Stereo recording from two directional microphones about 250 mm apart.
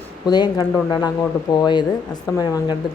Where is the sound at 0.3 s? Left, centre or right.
Centre.